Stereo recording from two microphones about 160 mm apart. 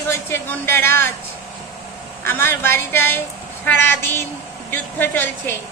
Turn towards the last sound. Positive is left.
turn(degrees=10)  # may be behind; listen again after turning